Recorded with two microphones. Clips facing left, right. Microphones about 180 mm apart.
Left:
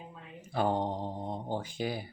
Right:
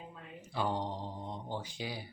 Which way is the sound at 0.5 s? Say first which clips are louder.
Left 5 dB; 50° left (ahead or behind).